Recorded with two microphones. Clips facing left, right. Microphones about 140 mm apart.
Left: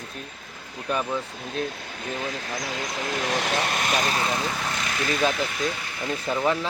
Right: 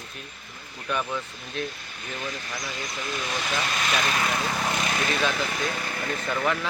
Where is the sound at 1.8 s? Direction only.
90° left; by 3.9 s 55° left (ahead or behind).